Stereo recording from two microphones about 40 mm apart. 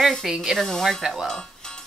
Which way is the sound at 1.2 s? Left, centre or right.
Centre.